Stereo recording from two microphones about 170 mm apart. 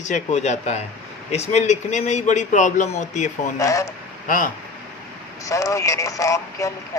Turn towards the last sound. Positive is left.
turn(degrees=20)  # may be behind; listen again after turning